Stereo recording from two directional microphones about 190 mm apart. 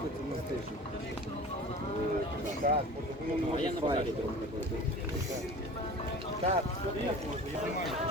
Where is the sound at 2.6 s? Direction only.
50° right (ahead or behind).